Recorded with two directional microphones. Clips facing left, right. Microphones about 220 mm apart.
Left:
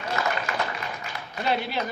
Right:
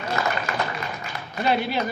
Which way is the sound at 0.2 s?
35° right (ahead or behind).